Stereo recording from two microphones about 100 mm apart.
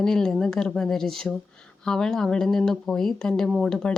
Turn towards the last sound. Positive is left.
turn(degrees=5)  # may be behind; listen again after turning